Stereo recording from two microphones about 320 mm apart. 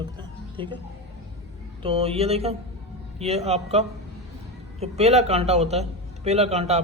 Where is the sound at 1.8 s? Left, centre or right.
Centre.